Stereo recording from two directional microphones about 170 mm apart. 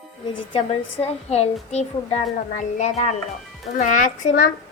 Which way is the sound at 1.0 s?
40° left (ahead or behind).